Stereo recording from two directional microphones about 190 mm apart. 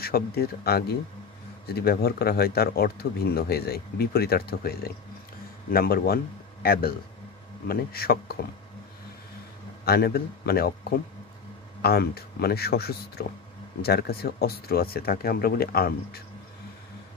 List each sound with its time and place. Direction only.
0.0 s speech: 55° left (ahead or behind)
9.8 s speech: 55° left (ahead or behind)